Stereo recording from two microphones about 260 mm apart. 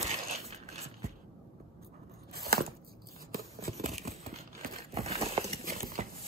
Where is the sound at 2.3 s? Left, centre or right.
Right.